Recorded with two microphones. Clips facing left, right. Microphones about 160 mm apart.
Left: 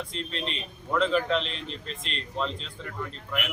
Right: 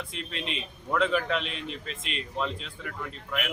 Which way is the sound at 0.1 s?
5° right (ahead or behind).